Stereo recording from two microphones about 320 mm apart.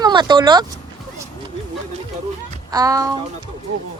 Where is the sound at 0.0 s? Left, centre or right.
Centre.